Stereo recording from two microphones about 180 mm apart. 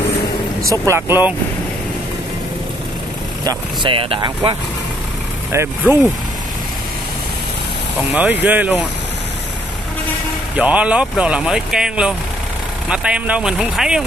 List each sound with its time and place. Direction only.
0.7 s speech: 15° right (ahead or behind)
3.4 s speech: 25° right (ahead or behind)
5.5 s speech: 15° right (ahead or behind)
8.1 s speech: 10° right (ahead or behind)
10.5 s speech: 5° right (ahead or behind)